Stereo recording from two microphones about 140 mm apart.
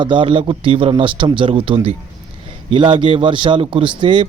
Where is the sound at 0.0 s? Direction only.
35° right (ahead or behind).